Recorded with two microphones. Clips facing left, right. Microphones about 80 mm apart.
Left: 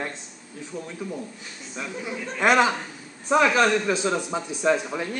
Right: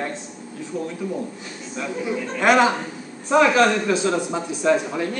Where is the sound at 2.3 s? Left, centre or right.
Centre.